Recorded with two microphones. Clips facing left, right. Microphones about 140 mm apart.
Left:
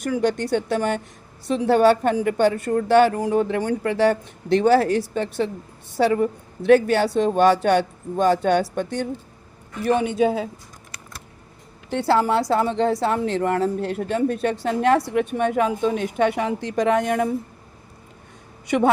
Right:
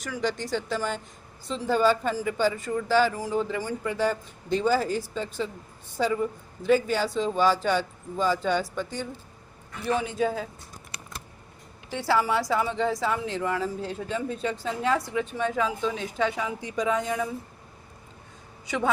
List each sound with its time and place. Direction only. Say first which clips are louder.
0.0 s a woman's voice: left 8 dB; 55° left (ahead or behind); by 10.5 s 70° left (ahead or behind)
11.9 s a woman's voice: left 6 dB; 60° left (ahead or behind)